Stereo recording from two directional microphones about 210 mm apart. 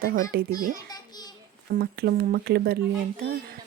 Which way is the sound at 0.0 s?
45° right (ahead or behind).